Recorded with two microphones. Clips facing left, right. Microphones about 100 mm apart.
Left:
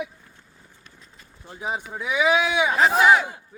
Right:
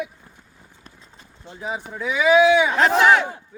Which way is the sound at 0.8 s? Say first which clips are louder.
Right 4 dB; 30° right (ahead or behind).